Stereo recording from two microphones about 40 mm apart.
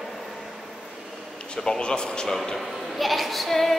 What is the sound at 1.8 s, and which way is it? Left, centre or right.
Speech, left.